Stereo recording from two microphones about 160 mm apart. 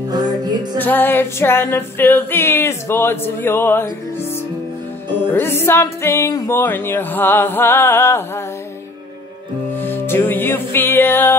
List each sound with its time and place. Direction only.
0.1 s music: 25° right (ahead or behind)
0.7 s music: 10° left (ahead or behind)
5.3 s music: 15° left (ahead or behind)
9.8 s music: 15° left (ahead or behind)